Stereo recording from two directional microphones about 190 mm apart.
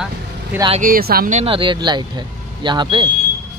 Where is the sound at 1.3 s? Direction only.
30° right (ahead or behind).